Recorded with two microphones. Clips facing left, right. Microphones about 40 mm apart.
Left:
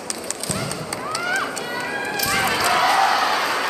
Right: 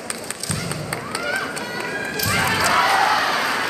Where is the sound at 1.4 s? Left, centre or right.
Centre.